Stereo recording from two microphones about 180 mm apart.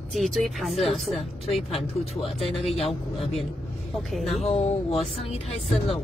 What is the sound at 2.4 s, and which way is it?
Speech, centre (ahead or behind).